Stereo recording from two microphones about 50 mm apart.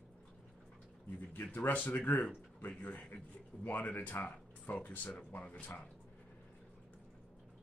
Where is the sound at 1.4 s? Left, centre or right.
Left.